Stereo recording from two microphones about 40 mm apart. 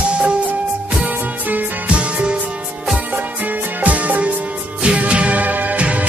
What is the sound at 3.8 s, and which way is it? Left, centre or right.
Music, right.